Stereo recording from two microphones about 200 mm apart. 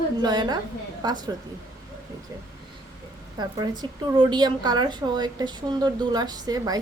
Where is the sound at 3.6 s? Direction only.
20° right (ahead or behind).